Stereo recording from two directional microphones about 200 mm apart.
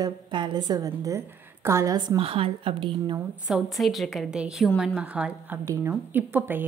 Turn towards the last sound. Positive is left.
turn(degrees=-10)  # may be behind; listen again after turning